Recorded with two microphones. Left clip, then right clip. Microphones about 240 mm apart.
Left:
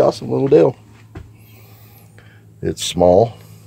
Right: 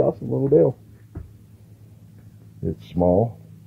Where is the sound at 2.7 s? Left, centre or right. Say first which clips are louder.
Left 8 dB; centre.